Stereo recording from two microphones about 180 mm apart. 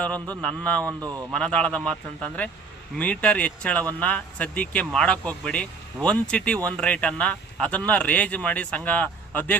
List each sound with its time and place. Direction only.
0.0 s speech: 5° left (ahead or behind)
0.9 s speech: 20° right (ahead or behind)
1.3 s speech: 5° left (ahead or behind)